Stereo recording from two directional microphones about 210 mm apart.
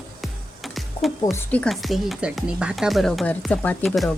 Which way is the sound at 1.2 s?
10° left (ahead or behind).